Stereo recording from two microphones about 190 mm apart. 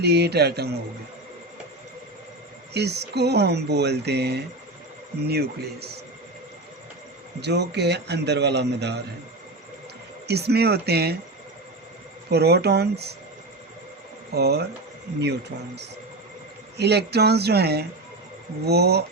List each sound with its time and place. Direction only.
0.0 s speech: 60° right (ahead or behind)
2.7 s speech: 60° right (ahead or behind)
7.4 s speech: 60° right (ahead or behind)
10.2 s speech: 60° right (ahead or behind)
12.3 s speech: 60° right (ahead or behind)
14.3 s speech: 60° right (ahead or behind)